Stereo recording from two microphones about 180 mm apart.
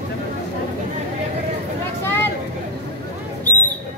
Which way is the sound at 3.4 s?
10° left (ahead or behind).